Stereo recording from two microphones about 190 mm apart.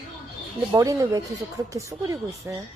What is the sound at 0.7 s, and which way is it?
Speech, 15° right (ahead or behind).